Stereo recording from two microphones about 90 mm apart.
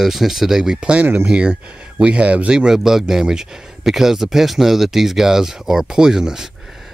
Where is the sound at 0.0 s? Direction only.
5° right (ahead or behind).